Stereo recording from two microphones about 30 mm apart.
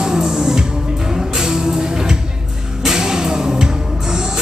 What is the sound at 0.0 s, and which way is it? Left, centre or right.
Music, centre.